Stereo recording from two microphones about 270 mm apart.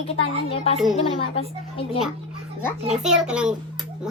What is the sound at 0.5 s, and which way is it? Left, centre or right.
Speech, left.